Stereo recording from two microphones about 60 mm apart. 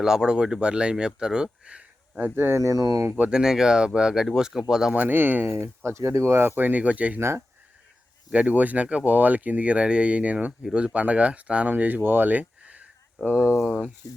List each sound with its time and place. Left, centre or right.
0.0 s speech: centre; by 2.6 s right
2.6 s speech: right
3.2 s speech: centre
4.9 s speech: right
5.8 s speech: right
6.6 s speech: right
7.2 s speech: right
8.3 s speech: right
13.6 s speech: centre
14.0 s speech: left